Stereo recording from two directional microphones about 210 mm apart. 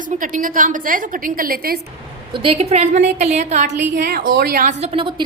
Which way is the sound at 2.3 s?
25° right (ahead or behind).